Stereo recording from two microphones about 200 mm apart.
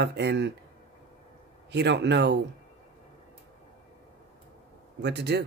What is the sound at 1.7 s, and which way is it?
Speech, 60° right (ahead or behind).